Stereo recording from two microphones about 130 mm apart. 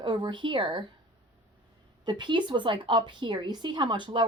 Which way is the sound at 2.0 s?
35° right (ahead or behind).